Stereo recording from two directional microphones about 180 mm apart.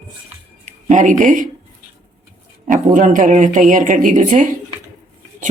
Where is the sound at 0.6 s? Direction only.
45° right (ahead or behind).